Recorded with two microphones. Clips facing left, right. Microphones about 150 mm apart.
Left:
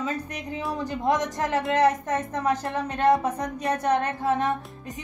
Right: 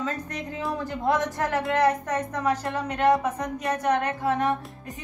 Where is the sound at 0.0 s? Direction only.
10° left (ahead or behind).